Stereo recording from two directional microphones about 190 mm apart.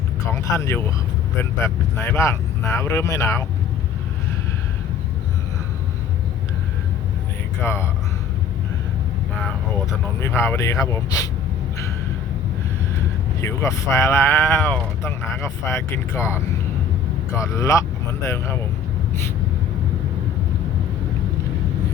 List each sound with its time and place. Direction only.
0.4 s speech: 15° left (ahead or behind)
7.6 s speech: 15° left (ahead or behind)
9.3 s speech: 10° left (ahead or behind)
13.4 s speech: 15° left (ahead or behind)